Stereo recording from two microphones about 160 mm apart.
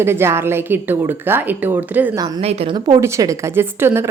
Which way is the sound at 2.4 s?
40° right (ahead or behind).